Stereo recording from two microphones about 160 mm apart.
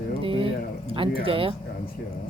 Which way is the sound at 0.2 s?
35° right (ahead or behind).